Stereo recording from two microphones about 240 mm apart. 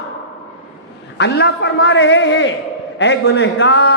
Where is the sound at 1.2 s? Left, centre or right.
Left.